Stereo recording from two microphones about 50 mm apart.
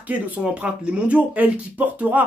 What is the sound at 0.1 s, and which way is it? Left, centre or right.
Speech, right.